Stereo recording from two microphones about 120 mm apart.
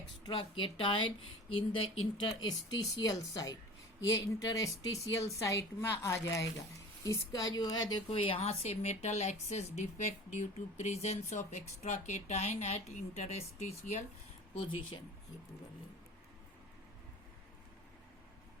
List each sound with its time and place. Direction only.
0.3 s a woman's voice: 45° left (ahead or behind)
8.1 s speech: 50° left (ahead or behind)